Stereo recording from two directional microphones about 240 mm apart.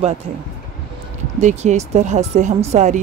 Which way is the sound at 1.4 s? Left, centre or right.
Right.